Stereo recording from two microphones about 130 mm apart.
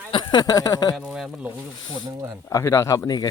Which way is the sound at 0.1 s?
35° left (ahead or behind).